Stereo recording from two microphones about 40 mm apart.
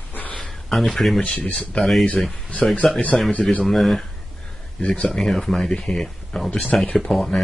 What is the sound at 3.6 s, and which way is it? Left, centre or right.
Speech, centre.